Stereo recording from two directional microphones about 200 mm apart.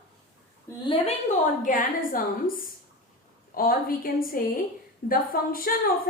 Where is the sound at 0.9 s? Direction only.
35° left (ahead or behind).